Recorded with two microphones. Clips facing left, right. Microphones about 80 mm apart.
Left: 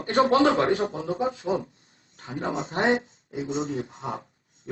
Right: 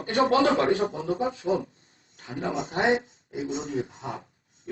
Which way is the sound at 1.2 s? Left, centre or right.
Left.